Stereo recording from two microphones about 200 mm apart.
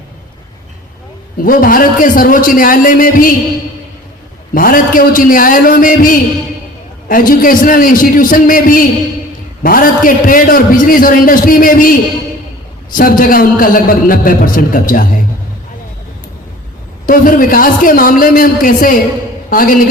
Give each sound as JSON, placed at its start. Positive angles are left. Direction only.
{"t": 1.5, "sound": "a man's voice", "side_deg": 45}
{"t": 4.5, "sound": "a man's voice", "side_deg": 45}
{"t": 17.1, "sound": "a man's voice", "side_deg": 45}